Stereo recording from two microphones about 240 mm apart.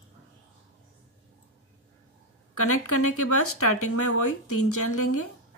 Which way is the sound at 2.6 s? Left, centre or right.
Left.